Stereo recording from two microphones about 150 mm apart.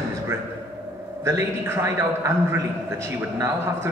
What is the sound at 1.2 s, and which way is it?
A man's voice, 15° right (ahead or behind).